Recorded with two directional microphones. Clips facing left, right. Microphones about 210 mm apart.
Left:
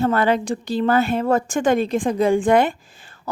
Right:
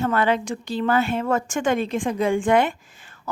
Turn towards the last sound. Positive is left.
turn(degrees=35)  # may be behind; listen again after turning